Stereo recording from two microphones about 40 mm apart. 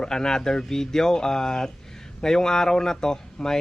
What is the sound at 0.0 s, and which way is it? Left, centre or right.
Speech, centre.